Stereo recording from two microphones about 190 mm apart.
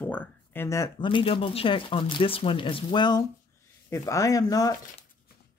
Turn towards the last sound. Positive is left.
turn(degrees=20)  # may be behind; listen again after turning